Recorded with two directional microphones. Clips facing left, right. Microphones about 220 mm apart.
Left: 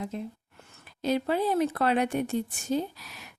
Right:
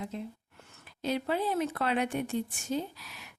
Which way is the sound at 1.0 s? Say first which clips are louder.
Left 4 dB; 40° left (ahead or behind).